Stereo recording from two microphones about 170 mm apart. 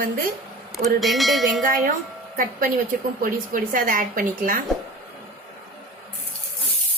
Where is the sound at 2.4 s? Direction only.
55° right (ahead or behind).